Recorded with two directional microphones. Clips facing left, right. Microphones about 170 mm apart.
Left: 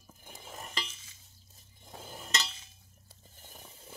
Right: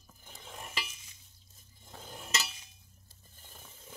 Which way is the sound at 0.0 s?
10° left (ahead or behind).